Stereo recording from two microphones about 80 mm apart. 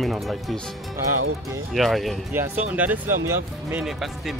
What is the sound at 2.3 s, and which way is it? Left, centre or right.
Speech, right.